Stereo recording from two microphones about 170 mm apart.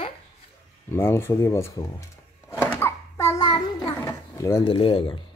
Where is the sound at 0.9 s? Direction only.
15° left (ahead or behind).